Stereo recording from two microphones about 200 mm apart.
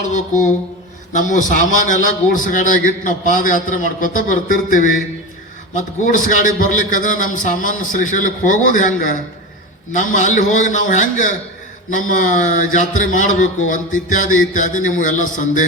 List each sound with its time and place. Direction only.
0.0 s a man's voice: 40° left (ahead or behind)